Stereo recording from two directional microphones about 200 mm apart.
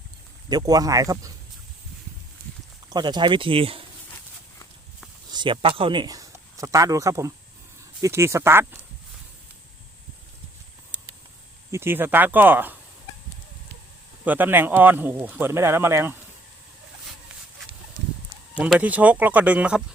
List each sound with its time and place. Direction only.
0.4 s speech: 20° right (ahead or behind)
2.9 s speech: 20° right (ahead or behind)
5.3 s speech: 25° right (ahead or behind)
11.7 s speech: 10° right (ahead or behind)
14.3 s speech: 10° right (ahead or behind)
18.5 s speech: 5° right (ahead or behind)